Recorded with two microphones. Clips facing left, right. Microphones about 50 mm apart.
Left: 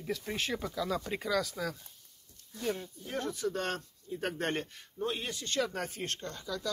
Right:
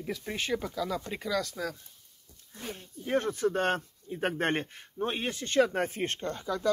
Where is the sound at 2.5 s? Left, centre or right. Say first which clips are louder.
Left 6 dB; right.